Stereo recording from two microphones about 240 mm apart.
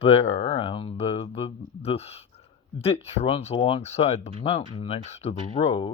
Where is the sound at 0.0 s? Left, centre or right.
Left.